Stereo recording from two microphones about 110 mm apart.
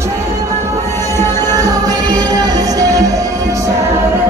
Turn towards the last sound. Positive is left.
turn(degrees=-30)  # may be behind; listen again after turning